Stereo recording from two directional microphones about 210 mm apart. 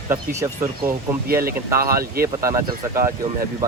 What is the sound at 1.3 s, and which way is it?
Speech, 45° right (ahead or behind).